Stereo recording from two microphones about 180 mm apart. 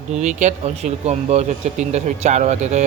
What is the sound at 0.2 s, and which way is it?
Speech, 40° right (ahead or behind).